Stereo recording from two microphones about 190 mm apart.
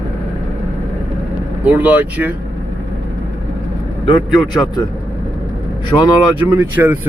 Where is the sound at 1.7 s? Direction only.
10° right (ahead or behind).